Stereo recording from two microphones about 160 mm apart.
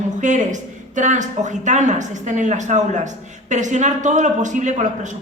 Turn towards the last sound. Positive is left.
turn(degrees=-50)  # may be behind; listen again after turning